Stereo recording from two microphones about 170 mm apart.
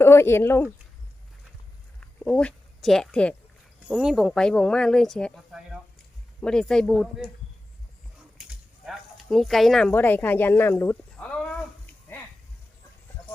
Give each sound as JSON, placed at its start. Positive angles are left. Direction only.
{"t": 0.0, "sound": "speech", "side_deg": 15}
{"t": 2.0, "sound": "a sound", "side_deg": 5}
{"t": 3.8, "sound": "speech", "side_deg": -5}
{"t": 8.4, "sound": "speech", "side_deg": 0}